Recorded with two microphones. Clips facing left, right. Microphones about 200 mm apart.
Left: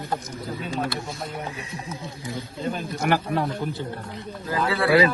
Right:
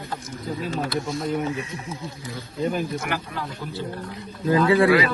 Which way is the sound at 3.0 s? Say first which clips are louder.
Left 6 dB; 50° left (ahead or behind).